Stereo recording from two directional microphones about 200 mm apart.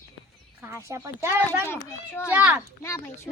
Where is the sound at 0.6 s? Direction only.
15° right (ahead or behind).